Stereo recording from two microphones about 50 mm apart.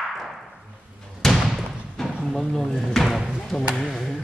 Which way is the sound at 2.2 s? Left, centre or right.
Centre.